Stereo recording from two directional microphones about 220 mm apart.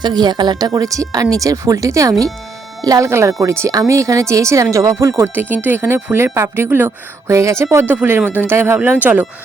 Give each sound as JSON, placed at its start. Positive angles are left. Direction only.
{"t": 0.0, "sound": "speech", "side_deg": -20}